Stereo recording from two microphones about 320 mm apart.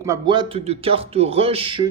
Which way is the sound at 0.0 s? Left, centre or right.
Centre.